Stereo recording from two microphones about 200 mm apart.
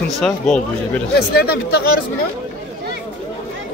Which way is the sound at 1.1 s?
50° left (ahead or behind).